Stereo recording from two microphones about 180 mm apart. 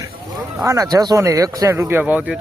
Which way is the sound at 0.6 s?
20° right (ahead or behind).